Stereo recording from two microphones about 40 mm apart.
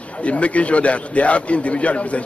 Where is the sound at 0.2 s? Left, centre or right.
Left.